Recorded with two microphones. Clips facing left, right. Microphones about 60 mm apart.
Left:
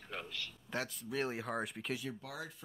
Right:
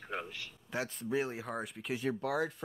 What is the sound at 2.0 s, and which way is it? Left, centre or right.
Speech, right.